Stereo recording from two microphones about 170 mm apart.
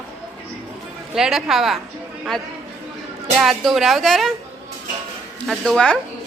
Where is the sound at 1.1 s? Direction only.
5° right (ahead or behind).